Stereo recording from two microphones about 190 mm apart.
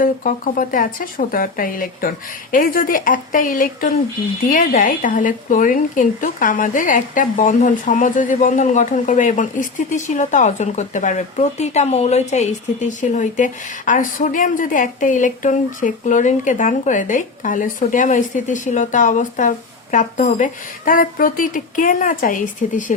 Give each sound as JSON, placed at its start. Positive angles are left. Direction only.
{"t": 0.0, "sound": "a woman's voice", "side_deg": 45}